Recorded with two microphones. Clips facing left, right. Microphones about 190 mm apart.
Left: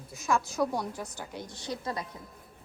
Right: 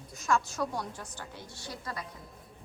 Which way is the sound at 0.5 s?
10° left (ahead or behind).